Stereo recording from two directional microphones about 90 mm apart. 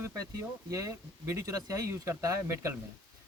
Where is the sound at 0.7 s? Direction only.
35° right (ahead or behind).